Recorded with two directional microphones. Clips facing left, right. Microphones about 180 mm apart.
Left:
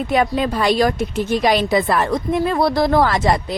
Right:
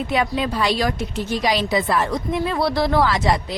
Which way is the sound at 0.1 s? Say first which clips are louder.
Left 5 dB; 50° left (ahead or behind).